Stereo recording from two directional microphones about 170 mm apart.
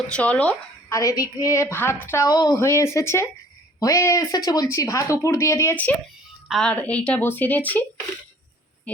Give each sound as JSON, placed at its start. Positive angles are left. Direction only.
{"t": 0.1, "sound": "a woman's voice", "side_deg": 10}
{"t": 0.9, "sound": "a woman's voice", "side_deg": 20}